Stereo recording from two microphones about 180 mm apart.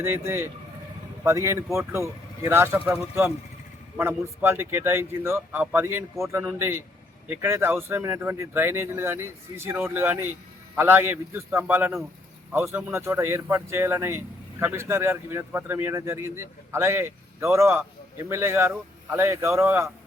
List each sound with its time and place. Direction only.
0.0 s speech: 15° right (ahead or behind)